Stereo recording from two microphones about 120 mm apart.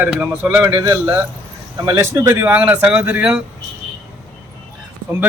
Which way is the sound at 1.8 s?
30° right (ahead or behind).